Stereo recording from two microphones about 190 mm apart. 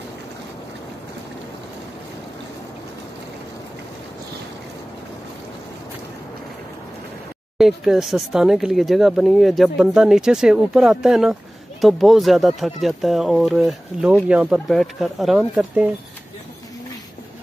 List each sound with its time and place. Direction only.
7.5 s speech: centre (ahead or behind)